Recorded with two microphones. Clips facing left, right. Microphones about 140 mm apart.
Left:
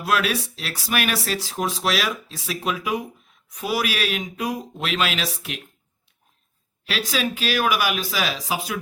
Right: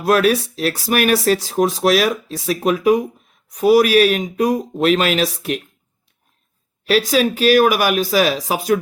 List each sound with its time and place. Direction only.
0.0 s speech: 45° right (ahead or behind)
6.8 s speech: 45° right (ahead or behind)